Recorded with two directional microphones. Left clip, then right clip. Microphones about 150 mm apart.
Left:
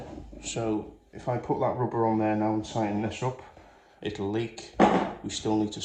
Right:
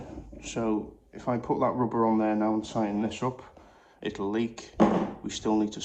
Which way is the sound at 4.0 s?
45° right (ahead or behind).